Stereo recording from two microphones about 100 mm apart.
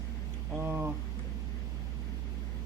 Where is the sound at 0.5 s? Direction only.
20° right (ahead or behind).